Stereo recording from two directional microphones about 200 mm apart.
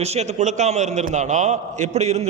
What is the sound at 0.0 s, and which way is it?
A man's voice, 30° right (ahead or behind).